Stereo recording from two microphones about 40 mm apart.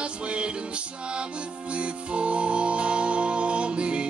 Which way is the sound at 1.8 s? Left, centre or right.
Right.